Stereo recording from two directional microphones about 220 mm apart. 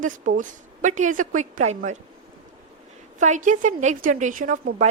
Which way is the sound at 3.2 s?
35° right (ahead or behind).